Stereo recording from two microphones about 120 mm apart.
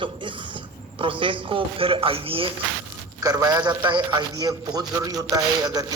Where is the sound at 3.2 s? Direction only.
35° right (ahead or behind).